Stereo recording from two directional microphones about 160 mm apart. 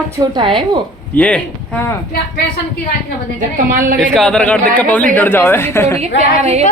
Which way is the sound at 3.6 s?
60° right (ahead or behind).